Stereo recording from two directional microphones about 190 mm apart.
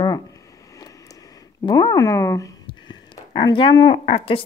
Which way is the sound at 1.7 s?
20° left (ahead or behind).